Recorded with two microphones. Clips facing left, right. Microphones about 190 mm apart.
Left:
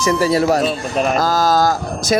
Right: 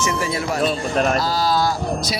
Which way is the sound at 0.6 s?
5° left (ahead or behind).